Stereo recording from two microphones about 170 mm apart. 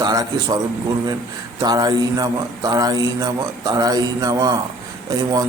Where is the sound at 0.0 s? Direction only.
25° right (ahead or behind).